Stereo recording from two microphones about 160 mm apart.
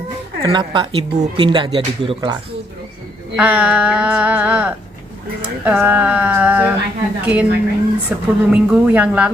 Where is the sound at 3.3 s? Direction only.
10° right (ahead or behind).